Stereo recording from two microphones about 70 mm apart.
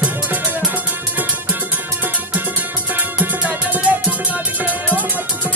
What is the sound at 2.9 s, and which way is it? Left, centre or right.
Music, right.